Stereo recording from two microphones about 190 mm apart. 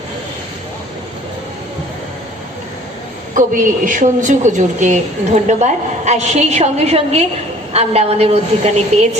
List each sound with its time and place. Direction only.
3.3 s a woman's voice: 45° right (ahead or behind)